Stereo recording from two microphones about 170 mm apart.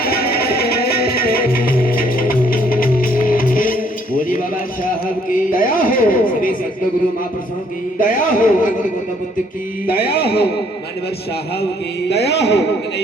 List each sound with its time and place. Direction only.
0.0 s music: 65° left (ahead or behind)
4.9 s a sound: 55° left (ahead or behind)
7.9 s a man's voice: 55° left (ahead or behind)
9.8 s speech: 65° left (ahead or behind)
12.0 s a man's voice: 85° left